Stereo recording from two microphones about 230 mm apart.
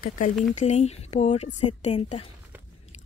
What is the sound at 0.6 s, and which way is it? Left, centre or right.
Speech, left.